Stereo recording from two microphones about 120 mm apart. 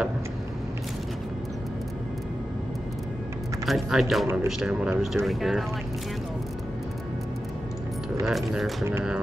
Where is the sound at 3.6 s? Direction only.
Centre (ahead or behind).